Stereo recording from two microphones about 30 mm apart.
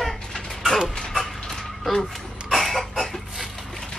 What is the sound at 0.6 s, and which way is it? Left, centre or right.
Mechanisms, centre.